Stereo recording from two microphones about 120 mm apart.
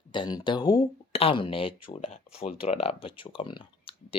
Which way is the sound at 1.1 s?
55° left (ahead or behind).